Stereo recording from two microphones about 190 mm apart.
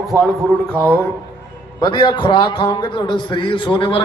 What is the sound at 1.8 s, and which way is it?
A man's voice, 25° left (ahead or behind).